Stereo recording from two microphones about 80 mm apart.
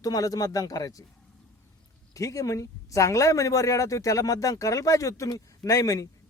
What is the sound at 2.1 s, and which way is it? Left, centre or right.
Speech, left.